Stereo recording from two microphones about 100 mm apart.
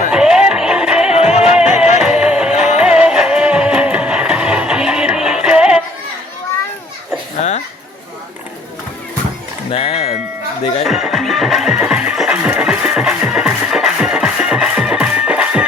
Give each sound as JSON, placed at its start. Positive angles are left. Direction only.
{"t": 0.1, "sound": "music", "side_deg": -10}
{"t": 1.1, "sound": "music", "side_deg": 90}
{"t": 1.5, "sound": "music", "side_deg": -10}
{"t": 9.7, "sound": "music", "side_deg": 80}
{"t": 10.8, "sound": "music", "side_deg": 0}